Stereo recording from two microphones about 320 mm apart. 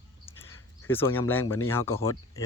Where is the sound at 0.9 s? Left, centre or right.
Centre.